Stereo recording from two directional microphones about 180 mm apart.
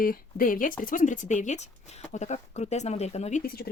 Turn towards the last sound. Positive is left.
turn(degrees=65)  # may be behind; listen again after turning